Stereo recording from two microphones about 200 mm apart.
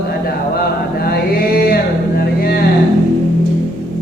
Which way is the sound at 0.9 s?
50° left (ahead or behind).